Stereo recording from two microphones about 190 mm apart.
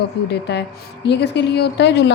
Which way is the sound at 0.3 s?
60° left (ahead or behind).